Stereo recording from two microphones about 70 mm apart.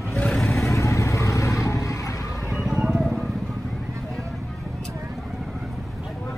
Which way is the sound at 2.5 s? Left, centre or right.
Centre.